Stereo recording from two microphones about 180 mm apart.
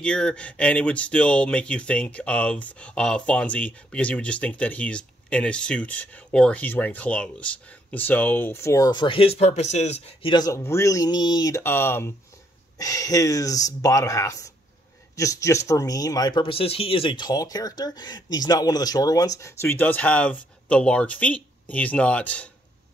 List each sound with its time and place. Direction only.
0.0 s speech: 5° left (ahead or behind)